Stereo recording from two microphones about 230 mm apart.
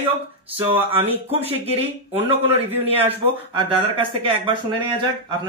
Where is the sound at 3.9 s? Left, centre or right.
Right.